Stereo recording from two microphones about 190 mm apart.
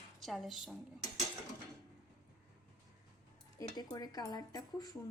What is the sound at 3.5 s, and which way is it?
Speech, 20° left (ahead or behind).